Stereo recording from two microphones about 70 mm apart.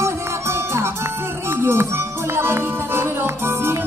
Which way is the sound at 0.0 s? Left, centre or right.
Right.